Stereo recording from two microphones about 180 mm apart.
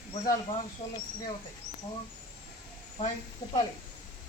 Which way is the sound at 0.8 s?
35° left (ahead or behind).